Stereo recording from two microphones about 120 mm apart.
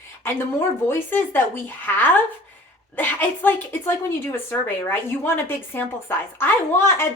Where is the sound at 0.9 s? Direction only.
20° left (ahead or behind).